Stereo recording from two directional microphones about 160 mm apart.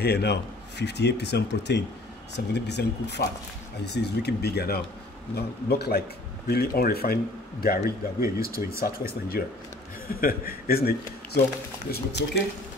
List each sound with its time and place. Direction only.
0.0 s speech: 90° left; by 11.0 s 70° left (ahead or behind)
11.9 s speech: 85° left